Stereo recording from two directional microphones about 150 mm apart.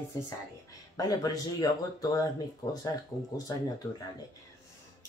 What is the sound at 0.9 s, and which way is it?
Speech, 25° left (ahead or behind).